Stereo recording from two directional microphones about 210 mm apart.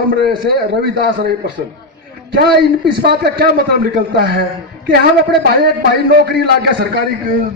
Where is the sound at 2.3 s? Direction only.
50° right (ahead or behind).